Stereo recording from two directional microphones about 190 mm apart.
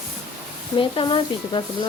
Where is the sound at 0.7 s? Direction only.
25° left (ahead or behind).